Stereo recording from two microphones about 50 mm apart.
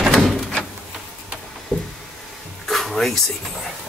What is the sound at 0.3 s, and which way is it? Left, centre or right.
Door, centre.